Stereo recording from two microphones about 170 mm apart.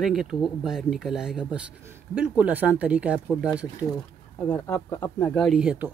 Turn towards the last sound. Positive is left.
turn(degrees=-5)  # may be behind; listen again after turning